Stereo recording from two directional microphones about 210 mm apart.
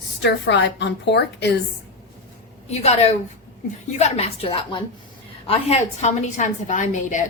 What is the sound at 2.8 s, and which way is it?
A woman's voice, 30° left (ahead or behind).